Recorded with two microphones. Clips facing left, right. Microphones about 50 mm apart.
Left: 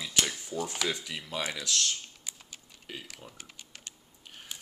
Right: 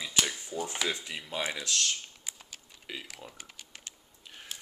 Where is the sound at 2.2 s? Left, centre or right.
Centre.